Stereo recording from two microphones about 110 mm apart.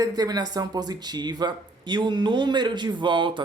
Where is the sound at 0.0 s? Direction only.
35° right (ahead or behind).